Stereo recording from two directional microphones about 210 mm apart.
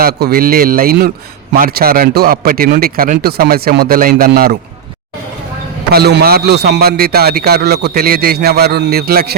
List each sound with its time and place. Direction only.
0.0 s a man's voice: 45° right (ahead or behind)
5.9 s a man's voice: 50° right (ahead or behind)